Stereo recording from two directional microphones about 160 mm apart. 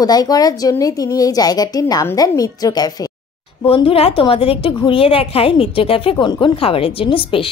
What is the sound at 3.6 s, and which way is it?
A woman's voice, 35° left (ahead or behind).